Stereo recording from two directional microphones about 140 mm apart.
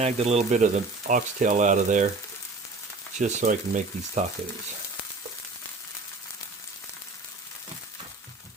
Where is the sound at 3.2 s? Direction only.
60° right (ahead or behind).